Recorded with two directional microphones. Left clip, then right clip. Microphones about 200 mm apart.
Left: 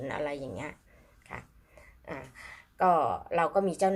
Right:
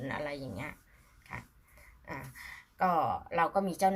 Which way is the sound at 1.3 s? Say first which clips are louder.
Left 1 dB; 5° left (ahead or behind).